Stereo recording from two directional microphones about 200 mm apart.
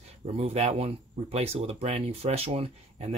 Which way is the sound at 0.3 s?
30° right (ahead or behind).